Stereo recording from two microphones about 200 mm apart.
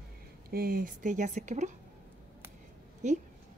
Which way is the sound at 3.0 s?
35° right (ahead or behind).